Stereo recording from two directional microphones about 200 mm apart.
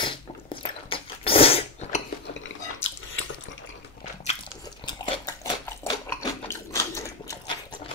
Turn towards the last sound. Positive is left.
turn(degrees=15)  # may be behind; listen again after turning